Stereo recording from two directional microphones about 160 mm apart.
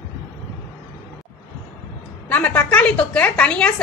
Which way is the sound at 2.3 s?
10° left (ahead or behind).